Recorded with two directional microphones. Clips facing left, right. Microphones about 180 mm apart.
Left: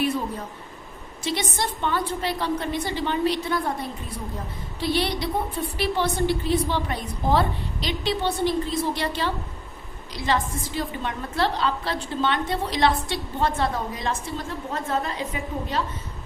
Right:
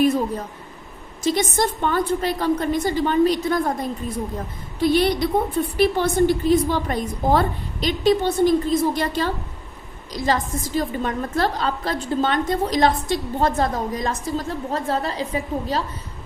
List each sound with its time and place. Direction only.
1.2 s a woman's voice: 45° right (ahead or behind)